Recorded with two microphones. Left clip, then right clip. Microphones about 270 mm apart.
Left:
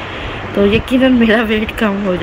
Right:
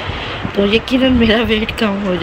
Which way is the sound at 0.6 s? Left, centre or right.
Centre.